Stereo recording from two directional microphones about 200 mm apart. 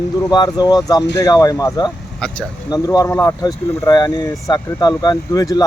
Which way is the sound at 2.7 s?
15° left (ahead or behind).